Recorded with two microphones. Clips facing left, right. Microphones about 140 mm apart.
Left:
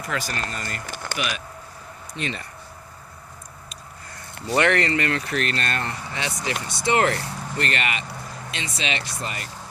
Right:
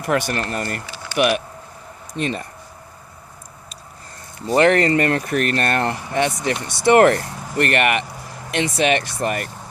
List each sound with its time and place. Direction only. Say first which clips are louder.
0.0 s speech: right 8 dB; 60° right (ahead or behind)
0.9 s a sound: left 1 dB; 50° left (ahead or behind)
2.1 s speech: right 7 dB; 45° right (ahead or behind)
4.4 s speech: right 6 dB; 35° right (ahead or behind); by 9.5 s 55° right (ahead or behind)